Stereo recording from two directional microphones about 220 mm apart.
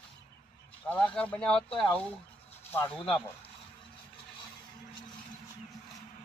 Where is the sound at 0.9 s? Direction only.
5° left (ahead or behind).